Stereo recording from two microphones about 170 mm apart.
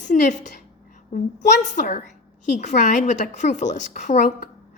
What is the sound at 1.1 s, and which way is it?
A woman's voice, 45° left (ahead or behind).